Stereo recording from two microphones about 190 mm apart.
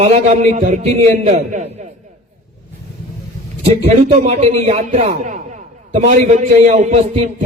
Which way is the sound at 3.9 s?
35° right (ahead or behind).